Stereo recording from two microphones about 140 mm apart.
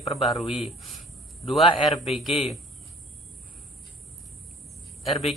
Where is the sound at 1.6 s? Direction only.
40° left (ahead or behind).